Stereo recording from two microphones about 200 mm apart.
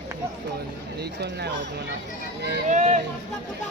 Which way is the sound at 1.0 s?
55° right (ahead or behind).